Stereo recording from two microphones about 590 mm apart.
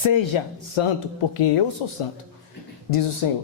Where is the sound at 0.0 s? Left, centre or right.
Left.